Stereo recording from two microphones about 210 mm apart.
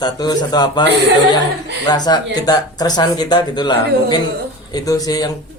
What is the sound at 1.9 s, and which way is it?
Speech, 20° left (ahead or behind).